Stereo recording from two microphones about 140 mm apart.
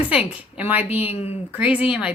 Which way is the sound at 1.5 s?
10° right (ahead or behind).